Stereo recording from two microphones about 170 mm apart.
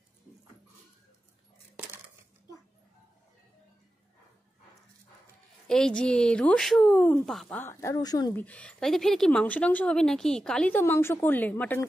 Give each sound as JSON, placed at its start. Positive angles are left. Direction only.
{"t": 5.7, "sound": "a woman's voice", "side_deg": 5}
{"t": 8.4, "sound": "speech", "side_deg": 10}